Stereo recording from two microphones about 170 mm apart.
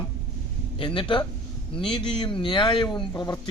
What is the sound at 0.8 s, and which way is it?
Speech, 30° left (ahead or behind).